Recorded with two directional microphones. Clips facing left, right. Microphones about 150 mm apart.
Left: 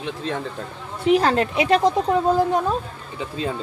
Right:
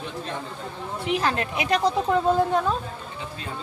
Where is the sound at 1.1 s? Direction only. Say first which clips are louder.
Left 8 dB; 35° left (ahead or behind).